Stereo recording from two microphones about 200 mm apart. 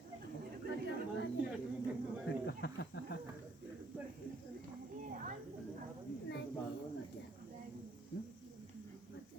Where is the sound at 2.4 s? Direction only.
60° left (ahead or behind).